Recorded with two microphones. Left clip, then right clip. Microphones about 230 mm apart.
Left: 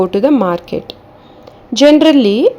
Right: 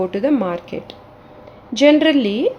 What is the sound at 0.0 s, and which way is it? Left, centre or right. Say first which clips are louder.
Speech: left 7 dB; left.